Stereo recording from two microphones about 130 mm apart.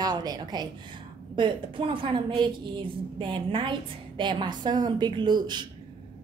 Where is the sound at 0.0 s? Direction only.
30° right (ahead or behind).